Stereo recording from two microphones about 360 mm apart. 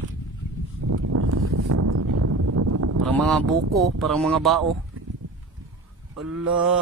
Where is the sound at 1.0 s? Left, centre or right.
Right.